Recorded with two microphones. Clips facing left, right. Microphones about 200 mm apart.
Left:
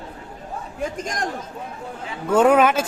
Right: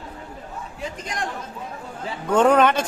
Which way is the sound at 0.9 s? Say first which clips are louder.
Left 3 dB; 45° left (ahead or behind).